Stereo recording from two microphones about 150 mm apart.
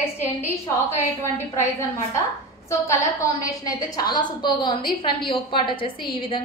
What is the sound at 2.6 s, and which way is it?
A woman's voice, 20° left (ahead or behind).